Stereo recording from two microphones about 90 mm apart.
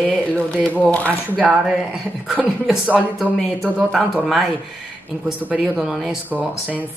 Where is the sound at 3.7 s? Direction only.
10° right (ahead or behind).